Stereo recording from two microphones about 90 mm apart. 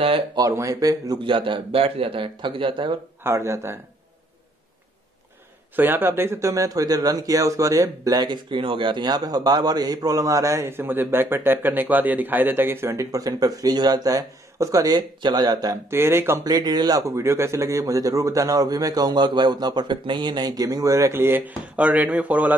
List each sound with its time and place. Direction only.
0.4 s speech: 35° right (ahead or behind)
1.2 s a man's voice: 70° right (ahead or behind)
3.3 s speech: 30° right (ahead or behind)
5.8 s speech: 20° right (ahead or behind); by 15.8 s 45° right (ahead or behind)
15.9 s speech: 30° right (ahead or behind)
16.4 s speech: 45° right (ahead or behind); by 22.6 s 15° right (ahead or behind)